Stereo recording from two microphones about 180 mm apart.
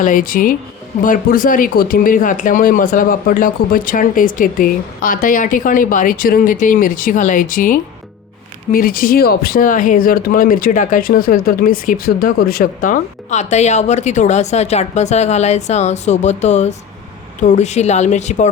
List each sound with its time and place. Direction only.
0.0 s speech: 50° left (ahead or behind)